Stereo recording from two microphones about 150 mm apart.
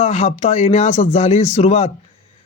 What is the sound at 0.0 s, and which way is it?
Speech, 45° left (ahead or behind).